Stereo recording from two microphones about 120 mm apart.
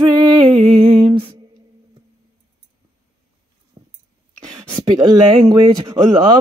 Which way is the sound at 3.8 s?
30° right (ahead or behind).